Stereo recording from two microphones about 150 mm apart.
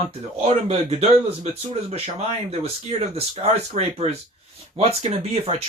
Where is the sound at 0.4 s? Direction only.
45° right (ahead or behind).